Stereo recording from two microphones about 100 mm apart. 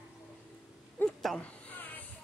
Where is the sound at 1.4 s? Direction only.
15° left (ahead or behind).